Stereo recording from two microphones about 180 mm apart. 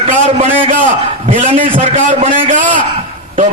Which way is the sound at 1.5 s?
30° right (ahead or behind).